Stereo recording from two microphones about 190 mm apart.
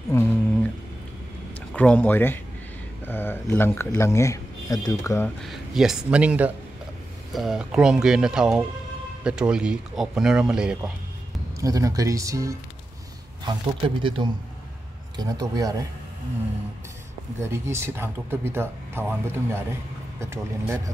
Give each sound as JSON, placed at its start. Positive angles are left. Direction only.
{"t": 0.1, "sound": "humming", "side_deg": 15}
{"t": 1.7, "sound": "speech", "side_deg": 5}
{"t": 5.4, "sound": "speech", "side_deg": 0}
{"t": 11.6, "sound": "speech", "side_deg": -20}
{"t": 17.4, "sound": "speech", "side_deg": -15}